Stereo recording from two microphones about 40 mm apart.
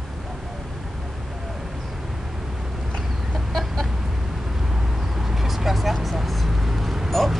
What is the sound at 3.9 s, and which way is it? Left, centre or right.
Vehicle, centre.